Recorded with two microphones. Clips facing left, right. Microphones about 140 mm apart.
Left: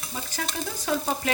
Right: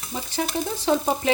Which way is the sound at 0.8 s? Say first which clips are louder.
Right 5 dB; 20° right (ahead or behind).